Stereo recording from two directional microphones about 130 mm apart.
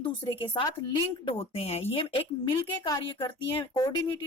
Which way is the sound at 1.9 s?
40° left (ahead or behind).